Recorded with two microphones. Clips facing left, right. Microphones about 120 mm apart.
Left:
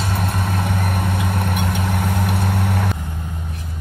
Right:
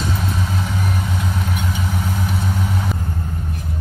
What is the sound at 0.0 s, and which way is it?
Vehicle, 55° left (ahead or behind).